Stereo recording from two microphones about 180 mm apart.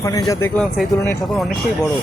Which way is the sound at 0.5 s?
5° left (ahead or behind).